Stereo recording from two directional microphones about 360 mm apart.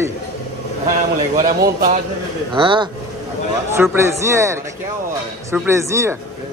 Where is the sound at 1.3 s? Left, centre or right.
Right.